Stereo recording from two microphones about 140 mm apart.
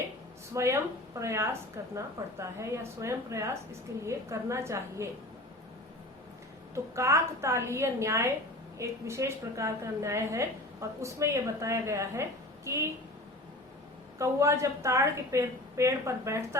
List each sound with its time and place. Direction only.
0.5 s a woman's voice: 20° right (ahead or behind)
6.7 s a woman's voice: 20° right (ahead or behind)
14.2 s a woman's voice: 20° right (ahead or behind)